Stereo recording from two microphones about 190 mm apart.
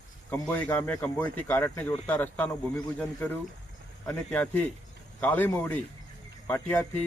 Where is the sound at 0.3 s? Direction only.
10° left (ahead or behind).